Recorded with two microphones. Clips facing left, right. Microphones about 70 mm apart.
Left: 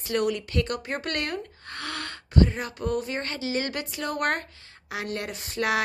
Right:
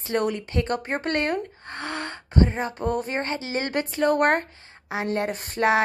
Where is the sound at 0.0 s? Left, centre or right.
Right.